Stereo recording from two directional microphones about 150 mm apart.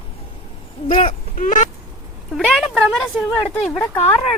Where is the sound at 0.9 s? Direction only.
50° left (ahead or behind).